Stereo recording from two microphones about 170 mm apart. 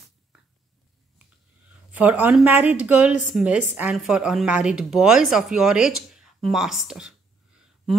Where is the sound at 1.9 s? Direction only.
10° right (ahead or behind).